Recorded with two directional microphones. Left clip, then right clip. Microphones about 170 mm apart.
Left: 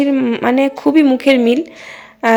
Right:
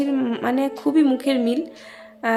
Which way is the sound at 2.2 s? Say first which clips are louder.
Left 9 dB; 30° left (ahead or behind).